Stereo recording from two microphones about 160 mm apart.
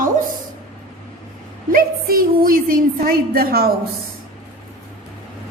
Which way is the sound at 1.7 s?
65° right (ahead or behind).